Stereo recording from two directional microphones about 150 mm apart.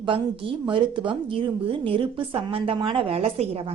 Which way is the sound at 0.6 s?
35° right (ahead or behind).